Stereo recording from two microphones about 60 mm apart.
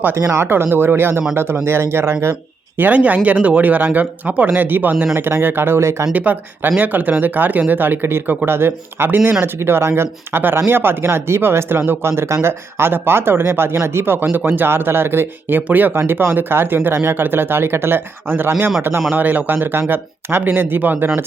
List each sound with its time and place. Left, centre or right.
0.2 s speech: right
0.4 s speech: right
2.7 s speech: right
5.1 s speech: right
6.1 s speech: right
18.8 s speech: right
19.1 s speech: right